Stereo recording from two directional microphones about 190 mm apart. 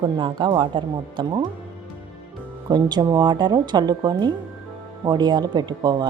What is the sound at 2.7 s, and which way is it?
Speech, 20° right (ahead or behind).